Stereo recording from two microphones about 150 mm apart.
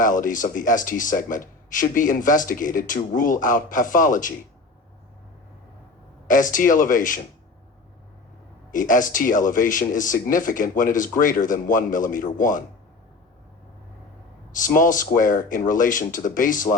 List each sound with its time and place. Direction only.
0.0 s a man's voice: 60° left (ahead or behind)
6.2 s a man's voice: 60° left (ahead or behind)
8.7 s a man's voice: 60° left (ahead or behind)
14.5 s a man's voice: 60° left (ahead or behind)